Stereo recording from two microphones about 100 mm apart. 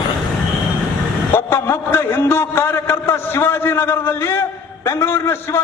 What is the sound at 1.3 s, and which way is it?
A man's voice, 25° left (ahead or behind).